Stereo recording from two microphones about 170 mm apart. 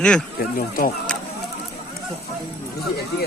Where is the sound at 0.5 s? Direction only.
60° left (ahead or behind).